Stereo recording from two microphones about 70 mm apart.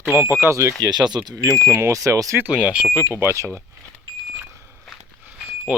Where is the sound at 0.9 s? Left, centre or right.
Right.